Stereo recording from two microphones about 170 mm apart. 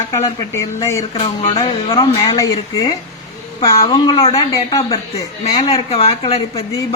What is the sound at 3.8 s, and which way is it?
Speech, 25° left (ahead or behind).